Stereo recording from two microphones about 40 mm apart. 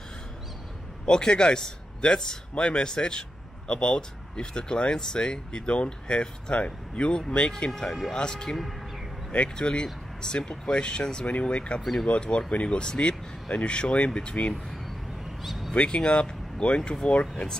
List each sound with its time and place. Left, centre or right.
1.0 s a man's voice: centre
11.8 s speech: centre
12.1 s a man's voice: left
15.4 s a sound: centre
15.7 s a man's voice: left